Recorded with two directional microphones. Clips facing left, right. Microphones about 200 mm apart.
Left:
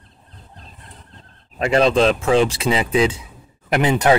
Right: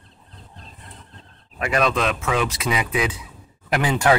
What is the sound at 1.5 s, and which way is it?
Speech, 30° left (ahead or behind).